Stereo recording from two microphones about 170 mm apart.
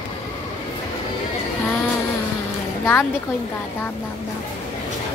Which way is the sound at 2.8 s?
15° left (ahead or behind).